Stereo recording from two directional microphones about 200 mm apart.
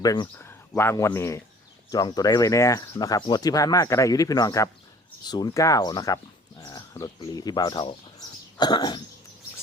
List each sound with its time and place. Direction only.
0.0 s speech: 20° left (ahead or behind)
8.5 s cough: 20° left (ahead or behind)